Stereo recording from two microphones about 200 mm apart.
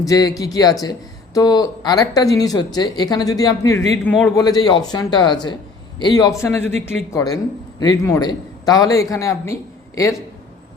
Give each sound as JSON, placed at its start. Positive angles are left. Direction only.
{"t": 0.0, "sound": "speech", "side_deg": 15}
{"t": 4.4, "sound": "a man's voice", "side_deg": 20}